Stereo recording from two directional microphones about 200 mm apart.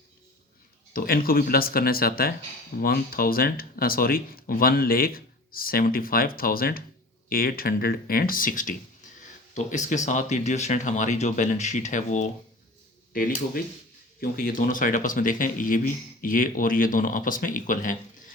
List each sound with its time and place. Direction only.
0.9 s speech: 45° left (ahead or behind)